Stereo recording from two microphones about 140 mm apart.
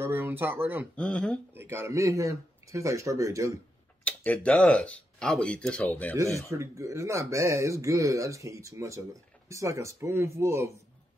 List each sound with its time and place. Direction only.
0.0 s speech: 15° right (ahead or behind)
0.9 s speech: 5° left (ahead or behind)
1.5 s speech: 15° right (ahead or behind)
4.0 s speech: 10° left (ahead or behind)
6.6 s speech: 20° right (ahead or behind)